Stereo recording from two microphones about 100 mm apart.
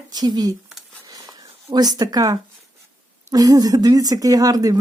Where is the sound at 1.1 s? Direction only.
40° right (ahead or behind).